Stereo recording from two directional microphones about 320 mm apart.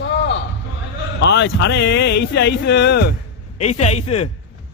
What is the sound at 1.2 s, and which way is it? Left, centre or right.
Speech, left.